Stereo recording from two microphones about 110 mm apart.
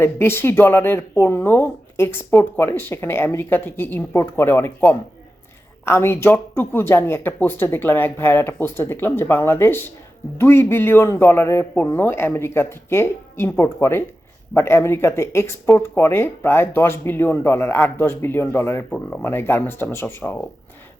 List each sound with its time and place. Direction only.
0.0 s speech: 20° left (ahead or behind)
19.2 s speech: 20° left (ahead or behind)